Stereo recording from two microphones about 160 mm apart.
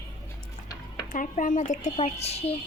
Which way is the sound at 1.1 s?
55° left (ahead or behind).